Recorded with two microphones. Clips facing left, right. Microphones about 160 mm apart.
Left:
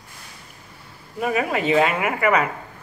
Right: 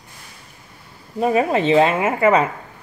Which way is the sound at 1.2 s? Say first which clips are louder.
Right 5 dB; 30° right (ahead or behind).